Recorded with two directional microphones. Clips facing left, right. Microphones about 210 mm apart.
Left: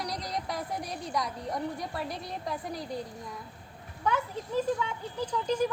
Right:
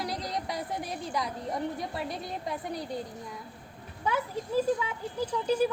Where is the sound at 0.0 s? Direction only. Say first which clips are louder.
Right 1 dB; centre (ahead or behind).